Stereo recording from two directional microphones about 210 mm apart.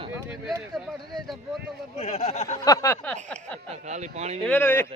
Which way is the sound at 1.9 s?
35° left (ahead or behind).